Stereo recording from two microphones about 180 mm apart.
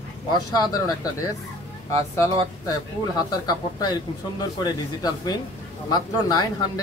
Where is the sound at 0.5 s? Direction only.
20° left (ahead or behind).